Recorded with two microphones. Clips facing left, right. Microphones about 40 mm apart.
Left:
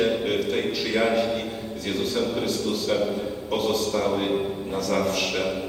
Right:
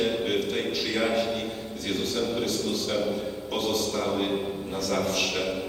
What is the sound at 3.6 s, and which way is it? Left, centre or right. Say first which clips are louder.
Speech: left 3 dB; left.